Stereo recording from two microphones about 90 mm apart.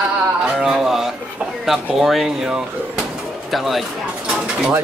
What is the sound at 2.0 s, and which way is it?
Speech, 5° right (ahead or behind).